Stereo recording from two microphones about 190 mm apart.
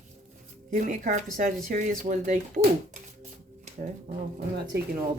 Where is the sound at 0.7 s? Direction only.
45° right (ahead or behind).